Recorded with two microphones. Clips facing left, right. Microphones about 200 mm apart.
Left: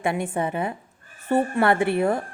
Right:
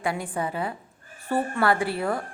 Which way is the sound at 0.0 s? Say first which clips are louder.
Left 3 dB; 25° left (ahead or behind).